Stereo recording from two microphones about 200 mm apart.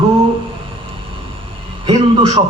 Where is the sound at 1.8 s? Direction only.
20° right (ahead or behind).